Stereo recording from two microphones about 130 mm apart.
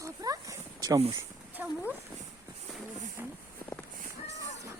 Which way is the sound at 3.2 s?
15° right (ahead or behind).